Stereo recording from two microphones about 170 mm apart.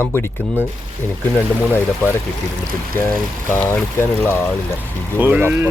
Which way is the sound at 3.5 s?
15° left (ahead or behind).